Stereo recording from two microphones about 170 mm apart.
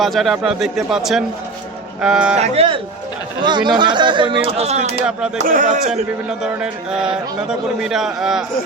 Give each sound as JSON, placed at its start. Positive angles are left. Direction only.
{"t": 0.0, "sound": "a man's voice", "side_deg": 0}
{"t": 2.3, "sound": "speech", "side_deg": -40}
{"t": 6.4, "sound": "a man's voice", "side_deg": -5}